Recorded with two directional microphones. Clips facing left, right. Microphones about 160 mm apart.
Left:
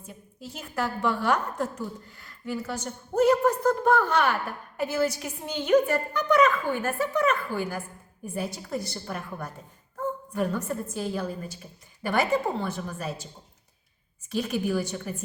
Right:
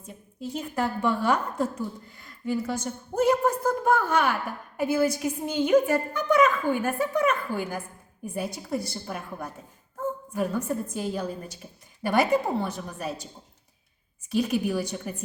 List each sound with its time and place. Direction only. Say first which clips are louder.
0.6 s a woman's voice: right 1 dB; 15° right (ahead or behind)
14.3 s a woman's voice: right 2 dB; 10° right (ahead or behind)